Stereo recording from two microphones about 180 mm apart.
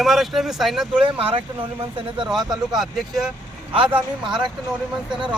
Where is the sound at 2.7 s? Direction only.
Centre (ahead or behind).